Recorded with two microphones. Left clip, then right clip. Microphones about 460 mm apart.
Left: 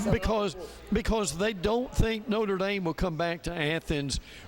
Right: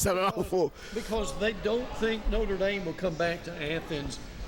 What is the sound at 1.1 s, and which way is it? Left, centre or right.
Speech, left.